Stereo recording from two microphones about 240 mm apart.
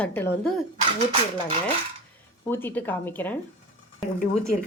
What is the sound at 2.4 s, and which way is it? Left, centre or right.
Speech, centre.